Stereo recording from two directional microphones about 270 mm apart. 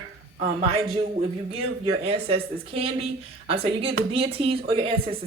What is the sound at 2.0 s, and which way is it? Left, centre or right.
Speech, right.